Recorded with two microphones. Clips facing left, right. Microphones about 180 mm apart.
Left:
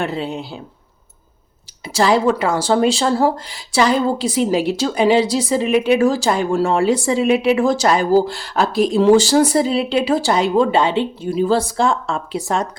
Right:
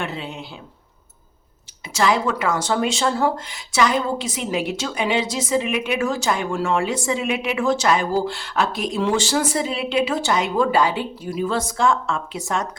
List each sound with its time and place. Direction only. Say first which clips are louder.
0.0 s speech: left 7 dB; 35° left (ahead or behind)
1.9 s speech: left 5 dB; 35° left (ahead or behind)